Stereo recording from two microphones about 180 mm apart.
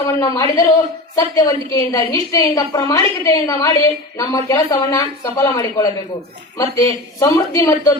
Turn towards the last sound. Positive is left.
turn(degrees=20)  # may be behind; listen again after turning